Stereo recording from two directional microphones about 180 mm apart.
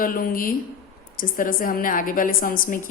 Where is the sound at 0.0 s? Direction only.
50° left (ahead or behind).